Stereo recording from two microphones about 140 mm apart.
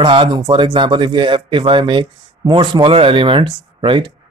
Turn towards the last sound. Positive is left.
turn(degrees=-35)  # may be behind; listen again after turning